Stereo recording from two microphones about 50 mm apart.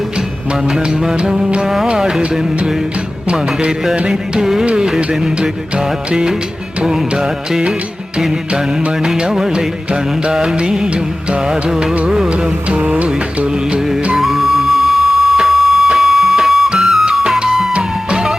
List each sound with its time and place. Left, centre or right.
0.7 s music: centre
9.0 s music: centre
12.3 s music: right
14.2 s music: centre
17.7 s music: centre